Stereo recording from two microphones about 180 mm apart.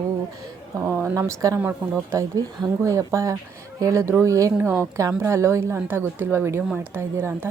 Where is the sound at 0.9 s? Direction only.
15° right (ahead or behind).